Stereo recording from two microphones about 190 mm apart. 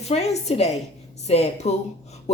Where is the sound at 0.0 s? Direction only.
35° left (ahead or behind).